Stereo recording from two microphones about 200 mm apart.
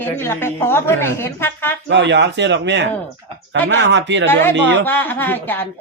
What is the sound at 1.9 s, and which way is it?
Speech, 60° right (ahead or behind).